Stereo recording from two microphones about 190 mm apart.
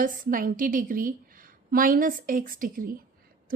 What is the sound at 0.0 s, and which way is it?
A woman's voice, 45° right (ahead or behind).